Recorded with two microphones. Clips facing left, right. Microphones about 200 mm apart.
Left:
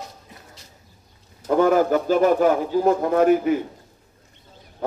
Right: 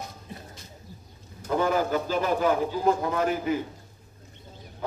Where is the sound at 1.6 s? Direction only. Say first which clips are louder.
Left 8 dB; 50° left (ahead or behind).